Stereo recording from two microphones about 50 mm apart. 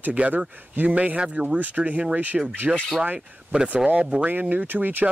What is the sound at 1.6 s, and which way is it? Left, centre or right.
Speech, right.